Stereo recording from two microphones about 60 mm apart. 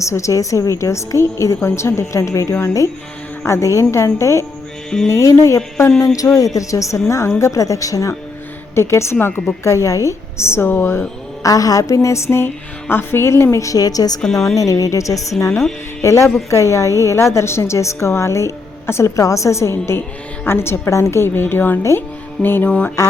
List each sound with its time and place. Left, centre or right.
0.0 s a woman's voice: left
6.1 s a woman's voice: left
7.1 s a woman's voice: left
8.7 s speech: left
9.2 s a woman's voice: left
9.6 s a woman's voice: left
11.4 s speech: left
12.0 s a woman's voice: left
14.2 s a woman's voice: centre
14.5 s speech: left
15.4 s a woman's voice: left
20.9 s a woman's voice: left
23.0 s a sound: left